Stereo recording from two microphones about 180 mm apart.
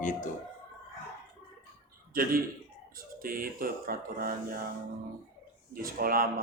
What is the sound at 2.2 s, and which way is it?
Speech, 55° right (ahead or behind).